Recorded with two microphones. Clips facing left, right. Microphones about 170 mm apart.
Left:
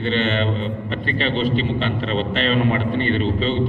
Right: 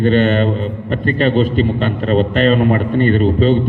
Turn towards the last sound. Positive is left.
turn(degrees=-45)  # may be behind; listen again after turning